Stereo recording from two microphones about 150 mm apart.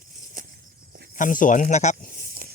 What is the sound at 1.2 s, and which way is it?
Speech, 60° left (ahead or behind).